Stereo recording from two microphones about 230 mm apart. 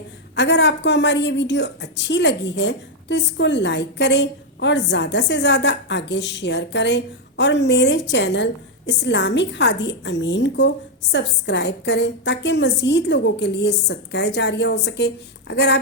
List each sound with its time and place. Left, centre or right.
0.3 s a woman's voice: left